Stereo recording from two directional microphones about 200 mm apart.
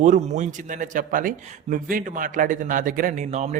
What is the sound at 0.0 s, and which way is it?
A man's voice, 40° right (ahead or behind).